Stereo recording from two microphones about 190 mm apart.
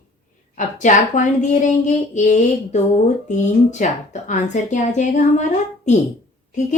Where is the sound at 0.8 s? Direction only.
40° left (ahead or behind).